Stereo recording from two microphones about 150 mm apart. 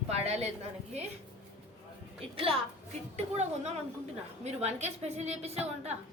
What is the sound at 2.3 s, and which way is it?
A woman's voice, 40° right (ahead or behind).